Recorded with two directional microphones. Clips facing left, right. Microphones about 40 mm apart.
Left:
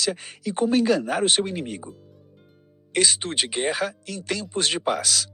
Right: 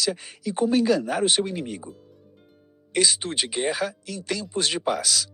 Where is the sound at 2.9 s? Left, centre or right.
Left.